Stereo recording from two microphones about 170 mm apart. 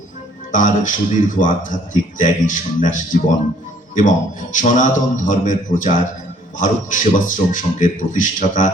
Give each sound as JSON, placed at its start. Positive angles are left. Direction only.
{"t": 0.5, "sound": "speech", "side_deg": 50}
{"t": 4.5, "sound": "speech", "side_deg": 50}